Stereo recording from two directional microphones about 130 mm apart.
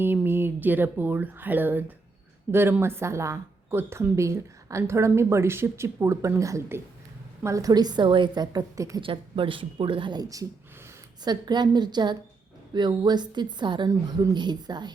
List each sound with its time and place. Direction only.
0.0 s a woman's voice: 15° right (ahead or behind)
9.0 s a woman's voice: 40° right (ahead or behind)